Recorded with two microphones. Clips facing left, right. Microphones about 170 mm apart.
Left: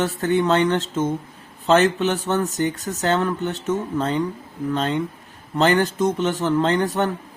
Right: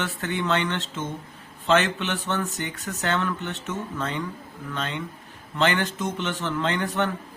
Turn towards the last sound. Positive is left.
turn(degrees=35)  # may be behind; listen again after turning